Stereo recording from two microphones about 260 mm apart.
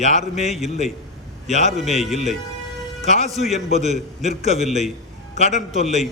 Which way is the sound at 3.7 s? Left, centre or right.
Right.